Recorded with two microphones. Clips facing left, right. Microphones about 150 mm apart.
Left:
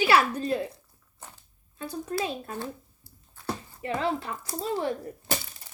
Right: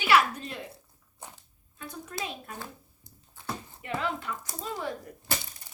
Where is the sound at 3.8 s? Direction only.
35° left (ahead or behind).